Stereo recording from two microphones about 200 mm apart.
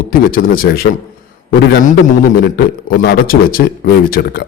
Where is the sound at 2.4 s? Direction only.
50° left (ahead or behind).